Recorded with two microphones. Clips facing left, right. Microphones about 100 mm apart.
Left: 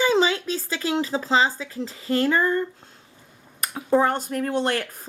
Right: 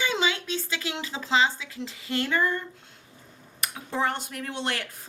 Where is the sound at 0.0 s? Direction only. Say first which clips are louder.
Left 7 dB; 35° left (ahead or behind).